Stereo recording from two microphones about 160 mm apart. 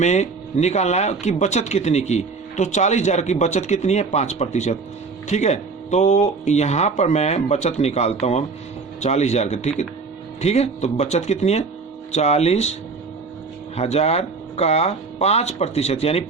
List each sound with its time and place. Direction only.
0.0 s speech: 45° left (ahead or behind)
13.7 s speech: 40° left (ahead or behind)